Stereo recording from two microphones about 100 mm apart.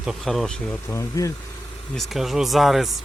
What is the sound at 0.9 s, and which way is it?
Speech, 25° left (ahead or behind).